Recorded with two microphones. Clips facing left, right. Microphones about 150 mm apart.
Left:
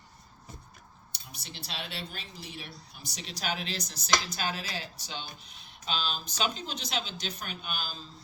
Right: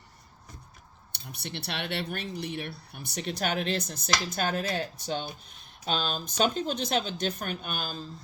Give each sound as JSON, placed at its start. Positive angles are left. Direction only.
{"t": 1.1, "sound": "speech", "side_deg": -60}